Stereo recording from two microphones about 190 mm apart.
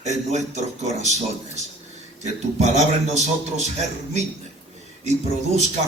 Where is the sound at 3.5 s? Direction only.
35° right (ahead or behind).